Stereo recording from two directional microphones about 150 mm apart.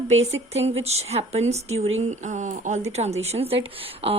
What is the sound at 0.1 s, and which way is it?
Speech, 45° right (ahead or behind).